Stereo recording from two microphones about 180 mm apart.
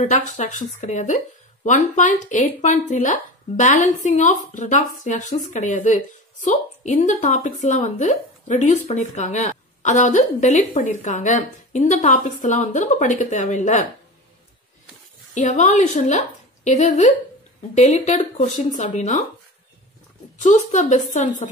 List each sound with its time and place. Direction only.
0.0 s a woman's voice: 40° left (ahead or behind)
15.3 s a woman's voice: 40° left (ahead or behind)
20.3 s speech: 45° left (ahead or behind)